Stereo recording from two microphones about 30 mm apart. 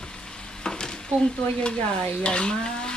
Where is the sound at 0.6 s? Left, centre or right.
Left.